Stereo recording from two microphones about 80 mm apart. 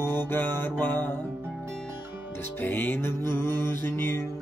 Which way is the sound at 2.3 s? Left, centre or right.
Left.